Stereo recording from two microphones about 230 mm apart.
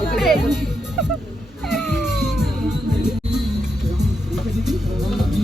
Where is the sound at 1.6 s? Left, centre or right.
Centre.